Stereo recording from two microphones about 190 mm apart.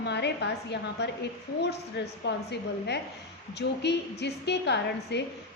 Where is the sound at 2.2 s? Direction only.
60° left (ahead or behind).